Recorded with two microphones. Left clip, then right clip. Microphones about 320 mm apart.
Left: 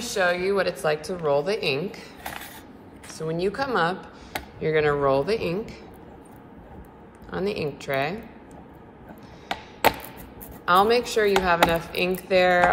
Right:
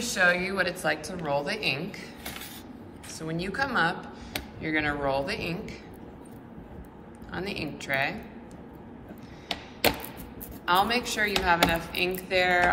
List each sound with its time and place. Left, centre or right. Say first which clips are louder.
0.0 s a woman's voice: left 1 dB; centre
3.2 s speech: left 4 dB; centre
7.2 s a woman's voice: left 7 dB; centre
10.6 s a woman's voice: left 5 dB; centre